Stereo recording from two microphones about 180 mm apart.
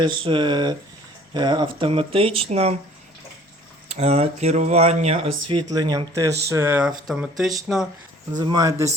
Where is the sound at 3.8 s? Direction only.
35° right (ahead or behind); by 7.5 s centre (ahead or behind).